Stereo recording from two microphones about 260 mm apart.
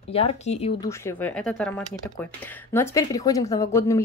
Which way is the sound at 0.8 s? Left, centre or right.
Centre.